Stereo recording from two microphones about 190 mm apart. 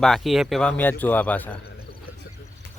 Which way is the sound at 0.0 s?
Centre (ahead or behind).